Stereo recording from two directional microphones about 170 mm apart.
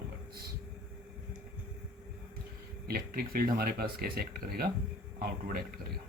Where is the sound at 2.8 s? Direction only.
60° right (ahead or behind).